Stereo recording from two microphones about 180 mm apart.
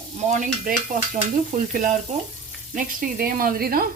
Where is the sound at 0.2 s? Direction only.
45° right (ahead or behind).